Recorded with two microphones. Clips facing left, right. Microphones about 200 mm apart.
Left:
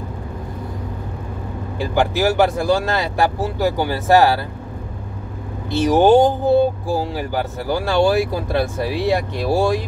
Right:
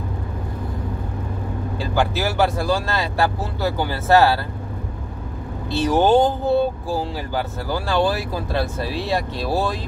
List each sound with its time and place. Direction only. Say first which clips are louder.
1.8 s speech: left 4 dB; 15° left (ahead or behind)
5.7 s speech: left 4 dB; 15° left (ahead or behind)